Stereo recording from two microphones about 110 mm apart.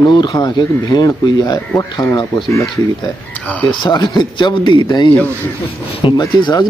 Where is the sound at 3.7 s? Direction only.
45° left (ahead or behind).